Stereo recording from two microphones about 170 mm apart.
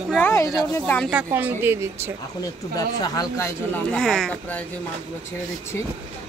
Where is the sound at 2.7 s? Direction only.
20° left (ahead or behind).